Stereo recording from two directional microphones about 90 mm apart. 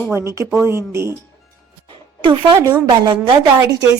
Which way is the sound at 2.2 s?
65° right (ahead or behind).